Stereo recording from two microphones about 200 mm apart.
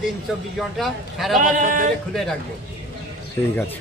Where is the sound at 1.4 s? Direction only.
40° right (ahead or behind).